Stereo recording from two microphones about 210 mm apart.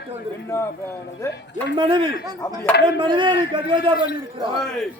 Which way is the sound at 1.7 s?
20° right (ahead or behind).